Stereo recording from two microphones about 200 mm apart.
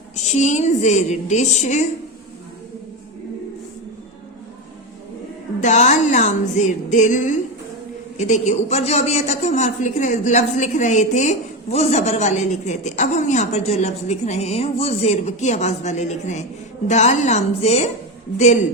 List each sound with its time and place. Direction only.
0.3 s a man's voice: 35° left (ahead or behind)
5.5 s a man's voice: 35° left (ahead or behind)